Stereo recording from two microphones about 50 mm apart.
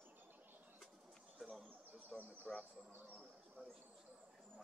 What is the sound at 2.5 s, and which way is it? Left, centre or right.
Speech, centre.